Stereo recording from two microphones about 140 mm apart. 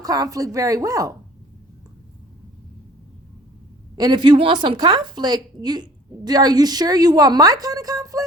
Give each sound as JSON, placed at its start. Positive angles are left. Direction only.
{"t": 0.0, "sound": "a woman's voice", "side_deg": -25}
{"t": 3.9, "sound": "a woman's voice", "side_deg": -30}